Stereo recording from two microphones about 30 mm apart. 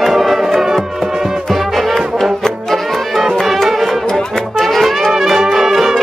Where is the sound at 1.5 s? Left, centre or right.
Centre.